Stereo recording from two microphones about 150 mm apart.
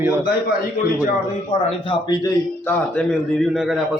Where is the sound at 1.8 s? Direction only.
30° left (ahead or behind).